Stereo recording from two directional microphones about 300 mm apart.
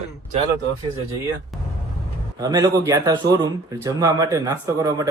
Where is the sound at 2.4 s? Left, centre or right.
Centre.